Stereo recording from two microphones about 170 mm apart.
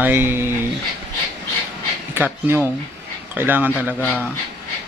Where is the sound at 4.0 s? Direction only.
10° left (ahead or behind).